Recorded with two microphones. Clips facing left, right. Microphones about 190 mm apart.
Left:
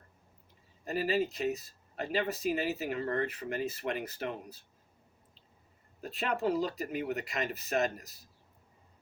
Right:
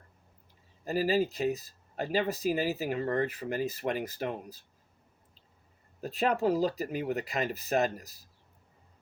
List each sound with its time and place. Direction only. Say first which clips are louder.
0.9 s speech: right 3 dB; 40° right (ahead or behind)
6.0 s speech: right 5 dB; 35° right (ahead or behind)